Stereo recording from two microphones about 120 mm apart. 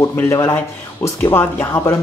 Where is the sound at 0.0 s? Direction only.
20° left (ahead or behind).